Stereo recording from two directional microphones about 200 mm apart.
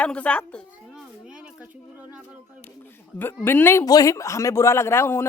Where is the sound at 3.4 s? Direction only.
10° left (ahead or behind).